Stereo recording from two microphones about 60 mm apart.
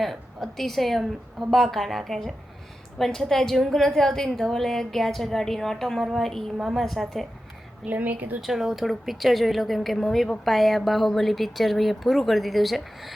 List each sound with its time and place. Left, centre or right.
0.0 s a woman's voice: centre
7.9 s a woman's voice: right
8.4 s a woman's voice: centre